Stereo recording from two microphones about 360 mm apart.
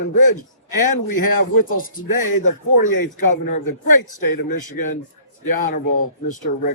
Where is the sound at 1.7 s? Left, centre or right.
Left.